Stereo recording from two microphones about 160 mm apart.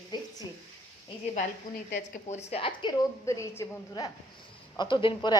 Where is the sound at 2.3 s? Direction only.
45° left (ahead or behind).